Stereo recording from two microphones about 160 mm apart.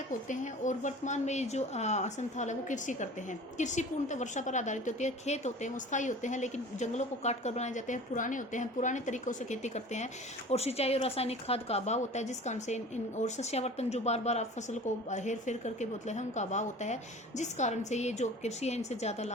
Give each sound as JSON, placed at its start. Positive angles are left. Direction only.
{"t": 0.1, "sound": "a woman's voice", "side_deg": 50}